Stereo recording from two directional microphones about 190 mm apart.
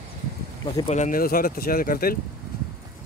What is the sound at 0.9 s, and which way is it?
Speech, 45° left (ahead or behind).